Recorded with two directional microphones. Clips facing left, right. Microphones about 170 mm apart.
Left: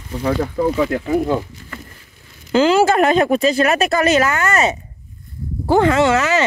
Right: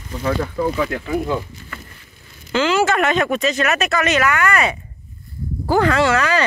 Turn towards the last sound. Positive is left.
turn(degrees=20)  # may be behind; listen again after turning